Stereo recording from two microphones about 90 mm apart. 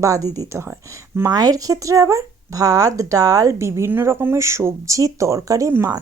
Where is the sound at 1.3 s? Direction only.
45° right (ahead or behind).